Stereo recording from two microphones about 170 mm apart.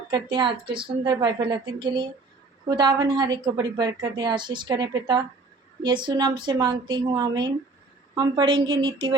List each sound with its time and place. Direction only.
0.1 s a woman's voice: 30° right (ahead or behind)